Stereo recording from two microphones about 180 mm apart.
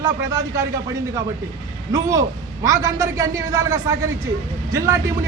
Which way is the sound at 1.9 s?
20° right (ahead or behind).